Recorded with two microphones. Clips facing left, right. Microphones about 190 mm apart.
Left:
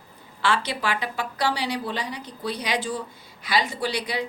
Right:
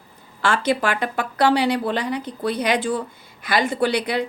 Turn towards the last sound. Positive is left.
turn(degrees=-55)  # may be behind; listen again after turning